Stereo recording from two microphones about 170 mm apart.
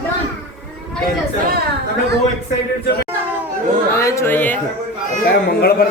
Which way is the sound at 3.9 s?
15° left (ahead or behind).